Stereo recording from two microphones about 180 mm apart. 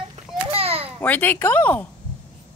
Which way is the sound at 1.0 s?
10° left (ahead or behind).